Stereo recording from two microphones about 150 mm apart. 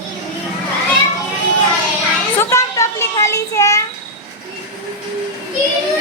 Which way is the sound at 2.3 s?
20° left (ahead or behind).